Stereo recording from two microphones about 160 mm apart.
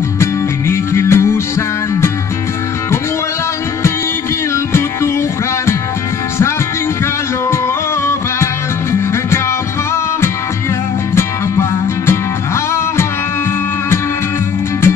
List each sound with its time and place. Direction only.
0.2 s music: 15° left (ahead or behind)